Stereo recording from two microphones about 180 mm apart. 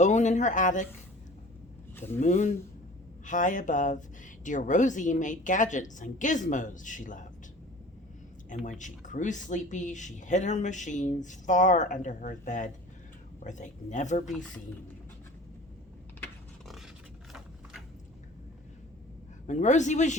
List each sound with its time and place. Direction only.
0.0 s speech: 40° left (ahead or behind)
2.2 s speech: 40° left (ahead or behind)
8.4 s speech: 45° left (ahead or behind)
16.6 s scrape: centre (ahead or behind)
19.5 s speech: 40° left (ahead or behind)